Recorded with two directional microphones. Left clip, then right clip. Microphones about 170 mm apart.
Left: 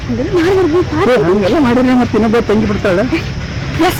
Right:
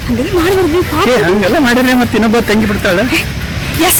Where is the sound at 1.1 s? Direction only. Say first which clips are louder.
Even; 20° right (ahead or behind).